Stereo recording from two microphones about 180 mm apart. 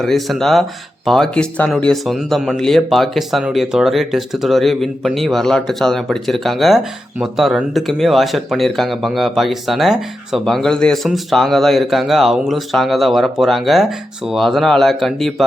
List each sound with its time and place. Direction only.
0.0 s speech: centre (ahead or behind)